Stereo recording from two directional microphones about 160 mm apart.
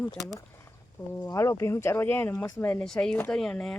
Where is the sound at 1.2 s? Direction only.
20° left (ahead or behind).